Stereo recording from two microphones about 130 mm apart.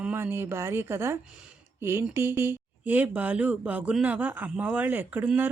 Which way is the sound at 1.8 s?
20° right (ahead or behind).